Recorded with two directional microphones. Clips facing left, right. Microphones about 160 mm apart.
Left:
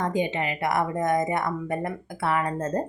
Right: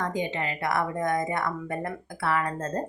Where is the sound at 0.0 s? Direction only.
20° left (ahead or behind).